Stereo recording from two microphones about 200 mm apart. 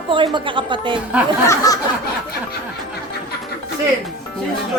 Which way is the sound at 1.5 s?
15° left (ahead or behind).